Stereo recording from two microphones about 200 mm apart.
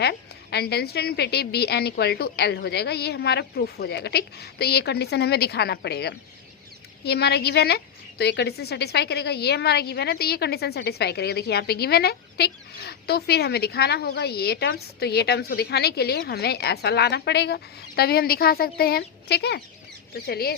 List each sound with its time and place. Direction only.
0.0 s a woman's voice: 55° left (ahead or behind)